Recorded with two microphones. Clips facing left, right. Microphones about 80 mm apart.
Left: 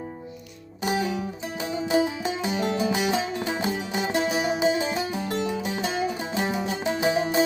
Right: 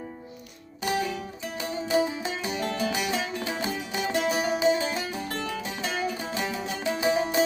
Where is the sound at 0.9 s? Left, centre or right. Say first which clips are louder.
Left 2 dB; left.